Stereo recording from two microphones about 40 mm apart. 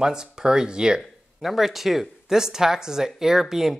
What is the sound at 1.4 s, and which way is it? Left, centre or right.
Speech, centre.